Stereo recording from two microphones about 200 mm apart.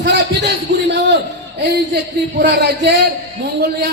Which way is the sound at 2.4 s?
55° right (ahead or behind).